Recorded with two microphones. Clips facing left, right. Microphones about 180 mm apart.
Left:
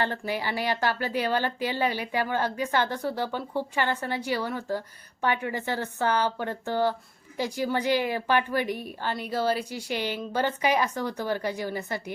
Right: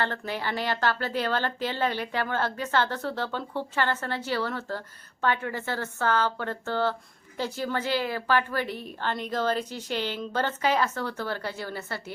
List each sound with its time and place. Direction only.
0.0 s speech: 15° left (ahead or behind)